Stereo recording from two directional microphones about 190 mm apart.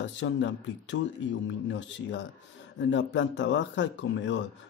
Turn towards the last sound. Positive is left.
turn(degrees=75)  # may be behind; listen again after turning